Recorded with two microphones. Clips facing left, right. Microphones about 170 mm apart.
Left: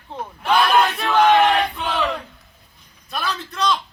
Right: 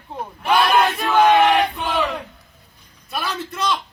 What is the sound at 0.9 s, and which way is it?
Battle cry, centre (ahead or behind).